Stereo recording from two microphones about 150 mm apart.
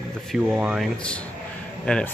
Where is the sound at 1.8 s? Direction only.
5° left (ahead or behind).